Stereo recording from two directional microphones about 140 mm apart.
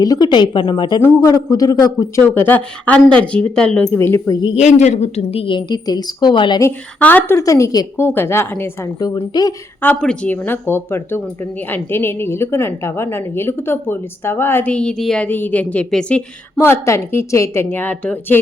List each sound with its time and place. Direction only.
0.0 s a woman's voice: 30° left (ahead or behind); by 3.8 s 5° left (ahead or behind)
3.9 s a woman's voice: 15° left (ahead or behind)
4.5 s a woman's voice: 55° left (ahead or behind); by 6.6 s 35° left (ahead or behind)
6.6 s a woman's voice: 15° left (ahead or behind)
9.8 s a woman's voice: 10° left (ahead or behind)
16.6 s a woman's voice: 20° left (ahead or behind)